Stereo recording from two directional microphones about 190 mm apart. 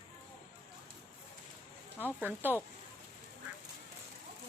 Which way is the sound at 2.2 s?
10° right (ahead or behind).